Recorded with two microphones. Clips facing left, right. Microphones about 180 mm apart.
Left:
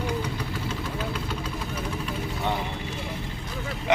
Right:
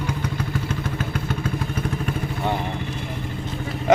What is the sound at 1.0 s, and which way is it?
Vehicle, 50° right (ahead or behind).